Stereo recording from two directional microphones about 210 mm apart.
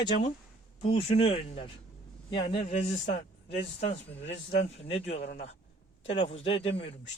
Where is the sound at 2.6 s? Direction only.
35° left (ahead or behind).